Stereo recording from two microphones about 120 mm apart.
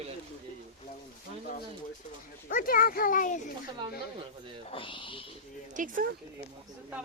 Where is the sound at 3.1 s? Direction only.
90° left.